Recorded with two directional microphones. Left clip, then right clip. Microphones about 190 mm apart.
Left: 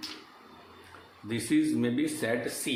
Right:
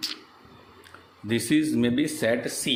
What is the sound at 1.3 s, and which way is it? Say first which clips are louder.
A man's voice: right 4 dB; 45° right (ahead or behind).